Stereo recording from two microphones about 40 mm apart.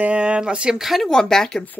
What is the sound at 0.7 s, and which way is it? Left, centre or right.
Speech, centre.